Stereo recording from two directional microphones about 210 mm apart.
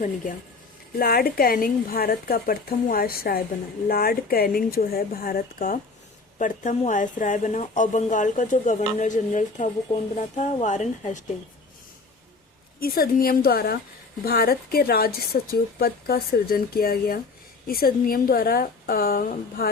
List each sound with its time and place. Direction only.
0.9 s speech: 45° left (ahead or behind)
12.8 s speech: 45° left (ahead or behind)